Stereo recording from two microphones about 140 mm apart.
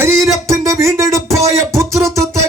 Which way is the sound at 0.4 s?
20° right (ahead or behind).